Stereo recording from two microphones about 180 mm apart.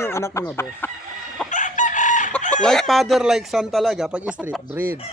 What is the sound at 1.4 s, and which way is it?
Chicken, 45° left (ahead or behind).